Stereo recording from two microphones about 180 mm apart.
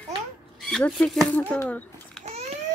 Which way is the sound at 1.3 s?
10° left (ahead or behind).